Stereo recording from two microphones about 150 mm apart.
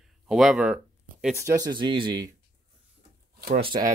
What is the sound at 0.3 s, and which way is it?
Speech, centre (ahead or behind).